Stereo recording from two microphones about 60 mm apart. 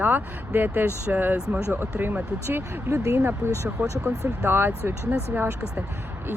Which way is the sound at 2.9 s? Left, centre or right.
Right.